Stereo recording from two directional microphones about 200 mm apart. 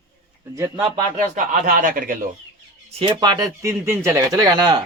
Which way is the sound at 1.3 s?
40° right (ahead or behind).